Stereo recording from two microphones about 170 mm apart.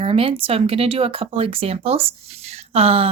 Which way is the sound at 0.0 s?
35° right (ahead or behind).